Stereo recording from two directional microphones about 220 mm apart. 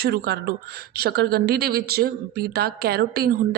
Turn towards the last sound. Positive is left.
turn(degrees=-45)  # may be behind; listen again after turning